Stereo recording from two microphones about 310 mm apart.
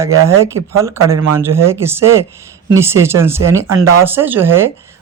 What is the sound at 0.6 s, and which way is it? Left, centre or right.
Speech, right.